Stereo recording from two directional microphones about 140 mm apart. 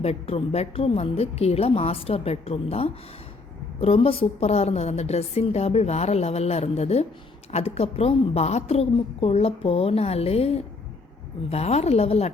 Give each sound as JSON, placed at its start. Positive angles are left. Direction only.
{"t": 0.0, "sound": "a woman's voice", "side_deg": 45}